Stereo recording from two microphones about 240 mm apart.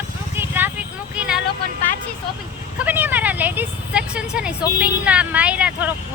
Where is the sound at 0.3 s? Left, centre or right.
Centre.